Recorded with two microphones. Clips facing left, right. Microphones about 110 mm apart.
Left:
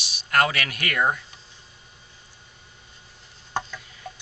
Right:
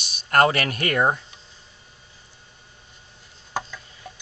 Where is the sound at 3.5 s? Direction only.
5° right (ahead or behind).